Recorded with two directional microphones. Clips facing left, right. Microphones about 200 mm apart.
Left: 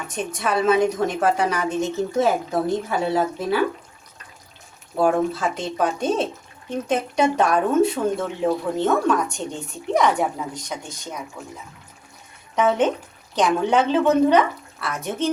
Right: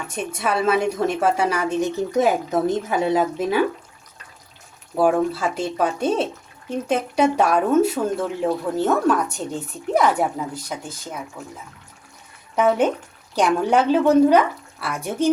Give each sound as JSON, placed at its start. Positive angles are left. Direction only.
{"t": 0.1, "sound": "a woman's voice", "side_deg": -10}
{"t": 5.0, "sound": "a woman's voice", "side_deg": -5}
{"t": 12.5, "sound": "a woman's voice", "side_deg": -10}